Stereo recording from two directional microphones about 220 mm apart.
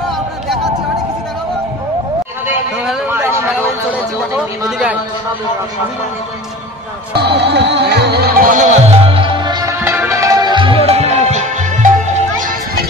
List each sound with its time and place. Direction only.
2.4 s a sound: 5° right (ahead or behind)
4.4 s speech: centre (ahead or behind)
7.2 s music: 50° right (ahead or behind)